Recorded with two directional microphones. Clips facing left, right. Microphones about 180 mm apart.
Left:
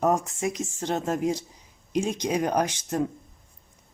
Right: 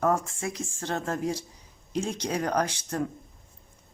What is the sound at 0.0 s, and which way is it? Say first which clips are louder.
Speech: left 2 dB; 20° left (ahead or behind).